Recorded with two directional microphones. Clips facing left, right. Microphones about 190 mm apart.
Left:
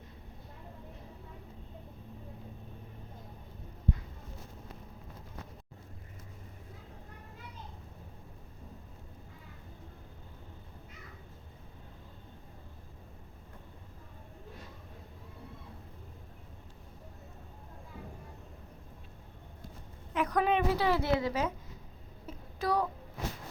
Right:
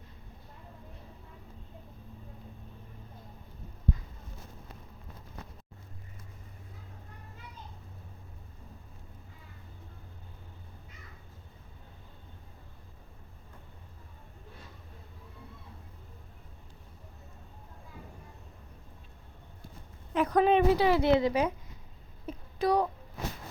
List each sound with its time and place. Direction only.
20.1 s a woman's voice: 30° right (ahead or behind)
20.7 s a woman's voice: 15° right (ahead or behind)
22.3 s a sound: 15° right (ahead or behind)